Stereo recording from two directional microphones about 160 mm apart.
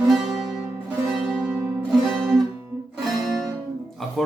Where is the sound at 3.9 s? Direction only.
Centre (ahead or behind).